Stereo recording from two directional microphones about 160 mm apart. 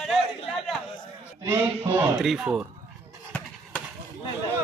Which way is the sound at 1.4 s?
15° right (ahead or behind).